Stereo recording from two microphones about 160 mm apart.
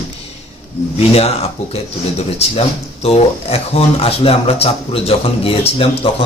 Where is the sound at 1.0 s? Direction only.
40° left (ahead or behind).